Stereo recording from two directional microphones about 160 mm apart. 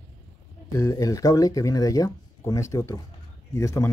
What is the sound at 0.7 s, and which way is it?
Speech, 20° left (ahead or behind).